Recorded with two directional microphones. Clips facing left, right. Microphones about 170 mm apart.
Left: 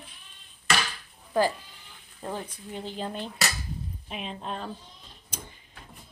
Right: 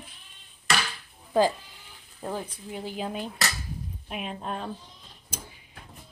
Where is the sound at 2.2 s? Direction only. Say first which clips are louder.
Right 2 dB; 10° right (ahead or behind).